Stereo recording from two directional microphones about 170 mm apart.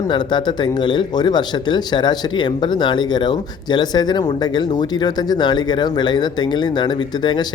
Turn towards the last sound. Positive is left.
turn(degrees=25)  # may be behind; listen again after turning